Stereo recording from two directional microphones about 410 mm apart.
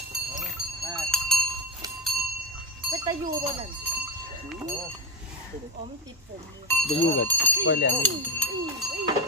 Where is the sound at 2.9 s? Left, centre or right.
Centre.